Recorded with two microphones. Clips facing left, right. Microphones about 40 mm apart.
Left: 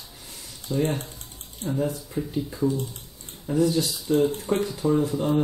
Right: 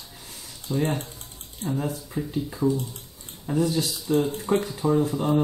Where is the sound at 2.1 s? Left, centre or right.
Centre.